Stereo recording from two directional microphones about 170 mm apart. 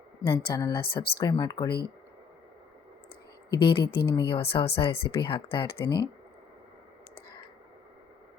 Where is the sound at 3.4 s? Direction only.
70° left (ahead or behind).